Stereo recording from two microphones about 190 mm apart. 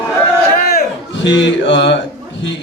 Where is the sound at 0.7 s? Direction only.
60° left (ahead or behind).